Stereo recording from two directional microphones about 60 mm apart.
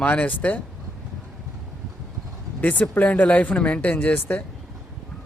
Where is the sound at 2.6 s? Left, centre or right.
Left.